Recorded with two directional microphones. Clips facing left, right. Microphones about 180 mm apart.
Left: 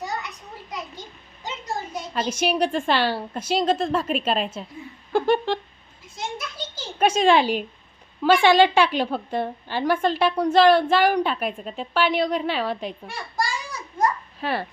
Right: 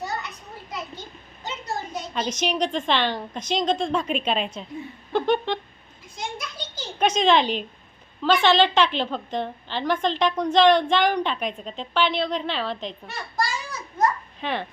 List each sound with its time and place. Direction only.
0.0 s children playing: 15° left (ahead or behind)
1.5 s a woman's voice: 10° left (ahead or behind)
6.1 s a sound: 5° left (ahead or behind)
8.2 s a woman's voice: 10° left (ahead or behind)